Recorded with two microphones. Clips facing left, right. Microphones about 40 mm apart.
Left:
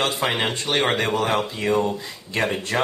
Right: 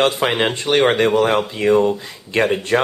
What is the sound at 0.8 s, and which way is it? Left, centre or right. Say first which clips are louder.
Speech: right 7 dB; right.